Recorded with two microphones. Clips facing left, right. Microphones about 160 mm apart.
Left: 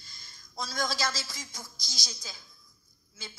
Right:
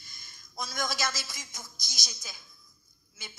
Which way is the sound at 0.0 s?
20° right (ahead or behind).